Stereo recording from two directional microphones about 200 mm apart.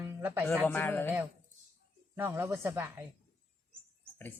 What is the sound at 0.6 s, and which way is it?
Speech, 10° left (ahead or behind).